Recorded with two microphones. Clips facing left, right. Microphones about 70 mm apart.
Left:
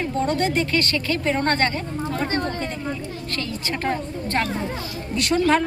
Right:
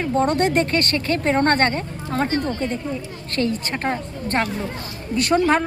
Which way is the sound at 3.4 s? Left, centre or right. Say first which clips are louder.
Right 7 dB; right.